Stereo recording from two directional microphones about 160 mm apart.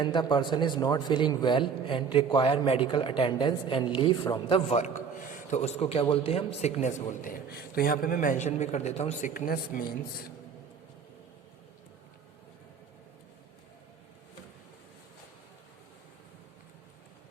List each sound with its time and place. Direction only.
0.0 s a man's voice: 30° left (ahead or behind)
5.5 s a man's voice: 45° left (ahead or behind)
9.3 s speech: 65° left (ahead or behind)